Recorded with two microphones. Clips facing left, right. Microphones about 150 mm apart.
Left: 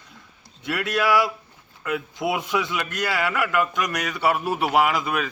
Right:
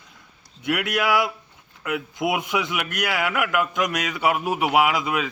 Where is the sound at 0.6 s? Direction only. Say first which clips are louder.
Even; 15° right (ahead or behind).